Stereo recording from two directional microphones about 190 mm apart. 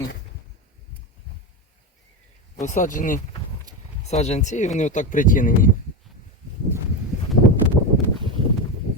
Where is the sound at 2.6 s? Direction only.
40° left (ahead or behind).